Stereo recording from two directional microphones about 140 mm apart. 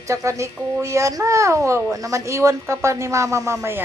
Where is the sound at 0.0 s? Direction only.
20° right (ahead or behind).